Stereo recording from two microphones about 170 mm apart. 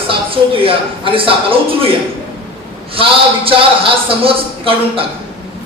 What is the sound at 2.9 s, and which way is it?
Speech, 30° right (ahead or behind).